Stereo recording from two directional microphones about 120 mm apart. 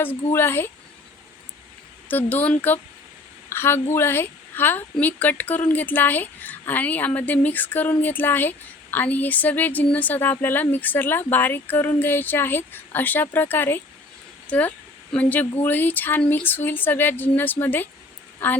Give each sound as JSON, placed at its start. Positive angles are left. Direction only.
{"t": 0.3, "sound": "speech", "side_deg": 20}
{"t": 2.0, "sound": "a woman's voice", "side_deg": 15}